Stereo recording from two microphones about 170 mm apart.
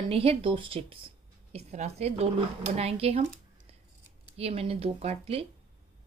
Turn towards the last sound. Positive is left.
turn(degrees=-35)  # may be behind; listen again after turning